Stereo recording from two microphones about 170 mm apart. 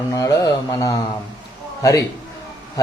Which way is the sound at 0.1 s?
20° left (ahead or behind).